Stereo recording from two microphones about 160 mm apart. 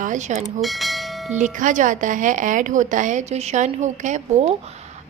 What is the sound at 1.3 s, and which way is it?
A woman's voice, 50° right (ahead or behind).